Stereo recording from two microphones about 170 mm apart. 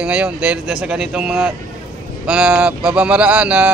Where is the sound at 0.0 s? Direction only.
5° right (ahead or behind).